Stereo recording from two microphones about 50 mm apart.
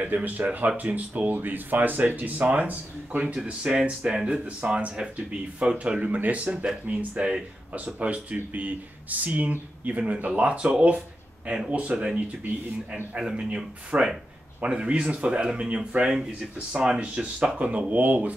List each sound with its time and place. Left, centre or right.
0.0 s speech: right